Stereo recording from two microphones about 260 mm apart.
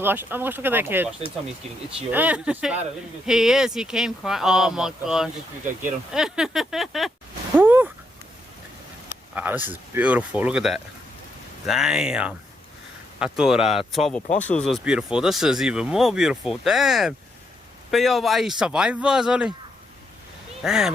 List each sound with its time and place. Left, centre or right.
0.0 s speech: centre
7.5 s a sound: centre
9.3 s speech: centre
20.6 s speech: centre